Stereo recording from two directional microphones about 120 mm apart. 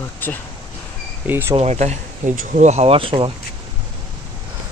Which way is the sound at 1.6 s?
70° right (ahead or behind).